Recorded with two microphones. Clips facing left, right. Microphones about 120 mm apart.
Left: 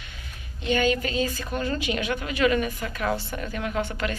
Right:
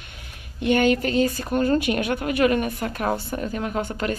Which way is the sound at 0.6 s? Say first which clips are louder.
Right 4 dB; 60° right (ahead or behind).